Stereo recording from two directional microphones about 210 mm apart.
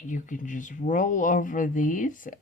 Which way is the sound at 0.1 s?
40° left (ahead or behind).